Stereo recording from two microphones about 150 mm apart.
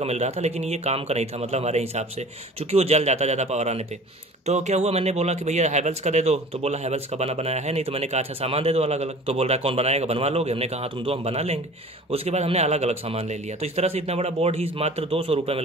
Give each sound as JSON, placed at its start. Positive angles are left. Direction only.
{"t": 0.0, "sound": "speech", "side_deg": -45}